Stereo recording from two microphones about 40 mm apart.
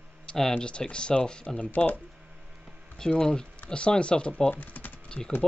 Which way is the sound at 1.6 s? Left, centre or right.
Left.